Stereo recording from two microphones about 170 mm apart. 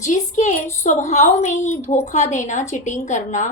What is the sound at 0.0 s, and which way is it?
A woman's voice, 45° left (ahead or behind).